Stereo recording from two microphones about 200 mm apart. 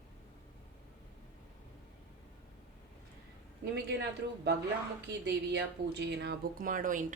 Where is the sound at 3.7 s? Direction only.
60° right (ahead or behind).